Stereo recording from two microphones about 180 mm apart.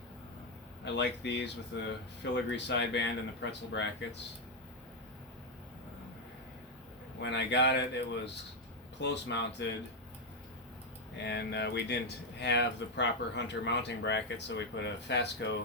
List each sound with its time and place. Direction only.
0.9 s speech: 75° left (ahead or behind)
7.2 s speech: 75° left (ahead or behind)
11.2 s speech: 70° left (ahead or behind)